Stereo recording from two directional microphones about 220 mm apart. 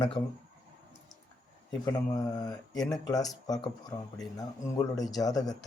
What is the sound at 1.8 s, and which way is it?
A man's voice, 20° left (ahead or behind).